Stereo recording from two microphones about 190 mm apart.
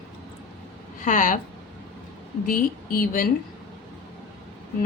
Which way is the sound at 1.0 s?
40° left (ahead or behind).